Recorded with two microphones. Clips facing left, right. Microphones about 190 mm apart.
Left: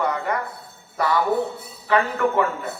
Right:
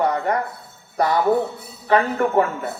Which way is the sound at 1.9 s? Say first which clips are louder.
Right 2 dB; 40° right (ahead or behind).